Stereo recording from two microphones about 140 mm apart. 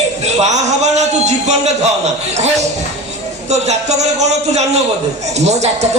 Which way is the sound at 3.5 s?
55° right (ahead or behind).